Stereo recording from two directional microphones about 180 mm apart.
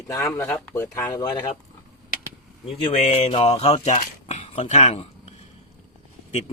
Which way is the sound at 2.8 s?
35° left (ahead or behind).